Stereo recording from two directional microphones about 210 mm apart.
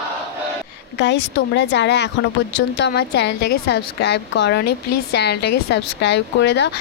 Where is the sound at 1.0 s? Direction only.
55° left (ahead or behind).